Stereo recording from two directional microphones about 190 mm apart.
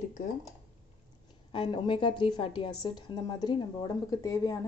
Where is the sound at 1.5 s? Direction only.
25° left (ahead or behind).